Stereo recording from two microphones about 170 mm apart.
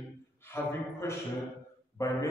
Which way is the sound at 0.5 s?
15° left (ahead or behind).